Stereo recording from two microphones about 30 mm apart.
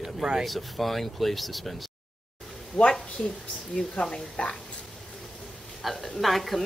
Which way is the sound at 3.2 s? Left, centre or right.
Left.